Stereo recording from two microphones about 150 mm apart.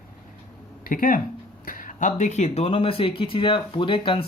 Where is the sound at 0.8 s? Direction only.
65° left (ahead or behind).